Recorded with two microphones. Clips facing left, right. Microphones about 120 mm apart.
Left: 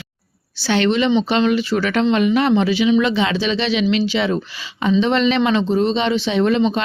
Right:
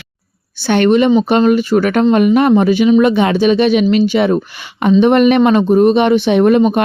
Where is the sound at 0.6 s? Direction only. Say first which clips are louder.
Right 6 dB; 55° right (ahead or behind).